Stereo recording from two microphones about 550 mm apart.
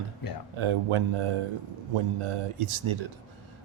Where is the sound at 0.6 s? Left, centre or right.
Right.